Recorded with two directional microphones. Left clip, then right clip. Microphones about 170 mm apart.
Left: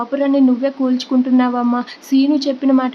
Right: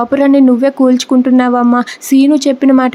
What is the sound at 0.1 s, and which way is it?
Speech, 40° right (ahead or behind).